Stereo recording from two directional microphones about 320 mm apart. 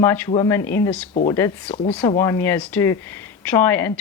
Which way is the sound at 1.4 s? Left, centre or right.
Centre.